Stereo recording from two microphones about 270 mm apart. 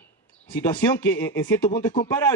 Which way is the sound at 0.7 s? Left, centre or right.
Centre.